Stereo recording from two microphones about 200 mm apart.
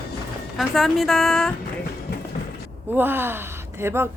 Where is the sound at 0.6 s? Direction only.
Centre (ahead or behind).